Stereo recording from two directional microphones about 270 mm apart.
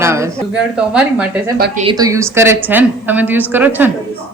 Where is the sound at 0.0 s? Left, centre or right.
Centre.